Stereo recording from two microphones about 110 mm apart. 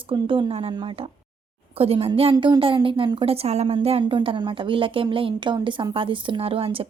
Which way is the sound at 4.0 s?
50° right (ahead or behind).